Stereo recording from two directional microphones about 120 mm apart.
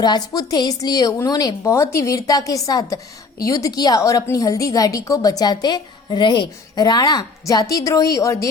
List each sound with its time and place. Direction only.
0.0 s a woman's voice: 35° left (ahead or behind)